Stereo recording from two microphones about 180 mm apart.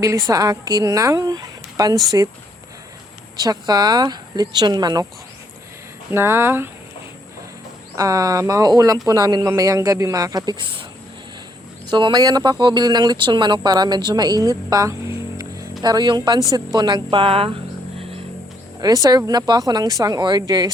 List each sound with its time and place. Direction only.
0.0 s speech: 15° right (ahead or behind)
3.3 s speech: 20° right (ahead or behind)
6.1 s speech: 15° right (ahead or behind)
7.9 s speech: 20° right (ahead or behind)
11.9 s speech: 25° right (ahead or behind)
18.8 s speech: 20° right (ahead or behind)